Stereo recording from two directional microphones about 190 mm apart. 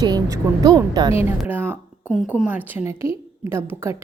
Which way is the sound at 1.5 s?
10° right (ahead or behind).